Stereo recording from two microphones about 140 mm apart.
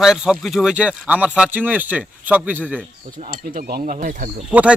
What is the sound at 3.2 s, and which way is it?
Speech, 85° right.